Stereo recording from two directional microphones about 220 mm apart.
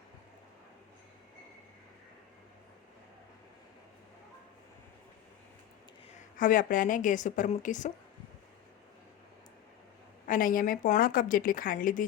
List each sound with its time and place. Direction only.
6.3 s a woman's voice: 40° left (ahead or behind)
10.2 s a woman's voice: 40° left (ahead or behind)